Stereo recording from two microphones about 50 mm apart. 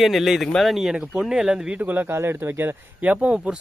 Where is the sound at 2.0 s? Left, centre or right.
Right.